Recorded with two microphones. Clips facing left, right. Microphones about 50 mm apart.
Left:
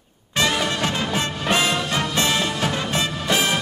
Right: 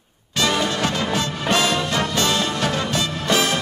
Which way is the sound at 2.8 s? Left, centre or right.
Left.